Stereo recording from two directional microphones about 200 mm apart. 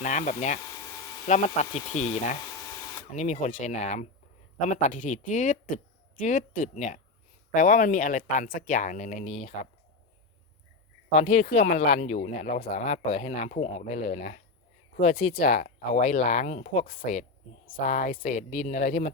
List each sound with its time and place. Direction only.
0.0 s speech: 40° left (ahead or behind)
11.1 s speech: 35° left (ahead or behind)
15.4 s speech: 40° left (ahead or behind)